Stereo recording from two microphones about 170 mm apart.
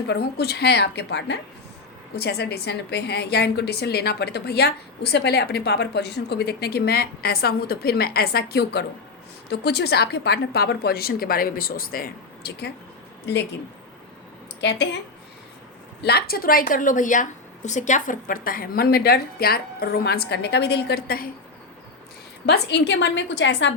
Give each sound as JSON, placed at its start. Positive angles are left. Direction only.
{"t": 0.1, "sound": "a woman's voice", "side_deg": 70}
{"t": 2.1, "sound": "a woman's voice", "side_deg": 75}
{"t": 14.6, "sound": "a woman's voice", "side_deg": 80}
{"t": 16.0, "sound": "a woman's voice", "side_deg": 65}
{"t": 22.4, "sound": "a woman's voice", "side_deg": 80}